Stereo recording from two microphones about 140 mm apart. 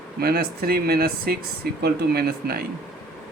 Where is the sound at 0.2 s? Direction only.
90° right.